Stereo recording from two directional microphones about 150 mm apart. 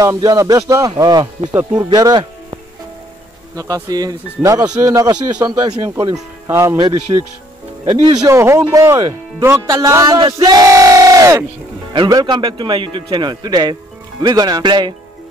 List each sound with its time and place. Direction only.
0.0 s battle cry: 25° right (ahead or behind)
1.5 s speech: 15° right (ahead or behind)
1.9 s speech: 30° right (ahead or behind)
3.5 s battle cry: 25° right (ahead or behind)
7.1 s a man's voice: 30° right (ahead or behind)
8.3 s battle cry: 20° right (ahead or behind)
11.9 s a man's voice: 30° right (ahead or behind)
14.2 s battle cry: 25° right (ahead or behind)